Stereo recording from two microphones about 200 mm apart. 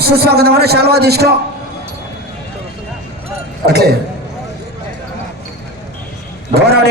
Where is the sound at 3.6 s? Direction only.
55° right (ahead or behind).